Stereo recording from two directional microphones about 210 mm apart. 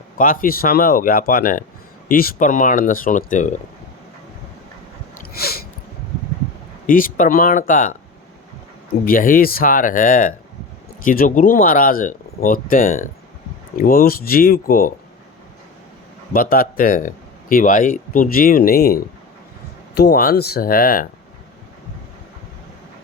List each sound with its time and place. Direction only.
0.2 s speech: 40° left (ahead or behind)
5.3 s a sound: 45° left (ahead or behind)
6.8 s speech: 40° left (ahead or behind)
9.0 s speech: 40° left (ahead or behind)
16.3 s speech: 45° left (ahead or behind)